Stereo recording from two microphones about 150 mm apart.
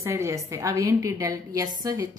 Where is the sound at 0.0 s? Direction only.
20° right (ahead or behind).